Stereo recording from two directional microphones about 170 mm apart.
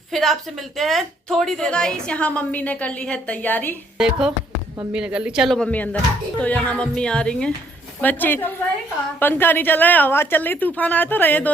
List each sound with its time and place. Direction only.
0.1 s a woman's voice: centre (ahead or behind)
3.9 s a woman's voice: 5° right (ahead or behind)